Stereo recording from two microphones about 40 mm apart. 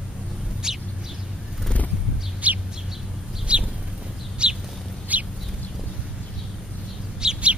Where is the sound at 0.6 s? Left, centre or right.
Centre.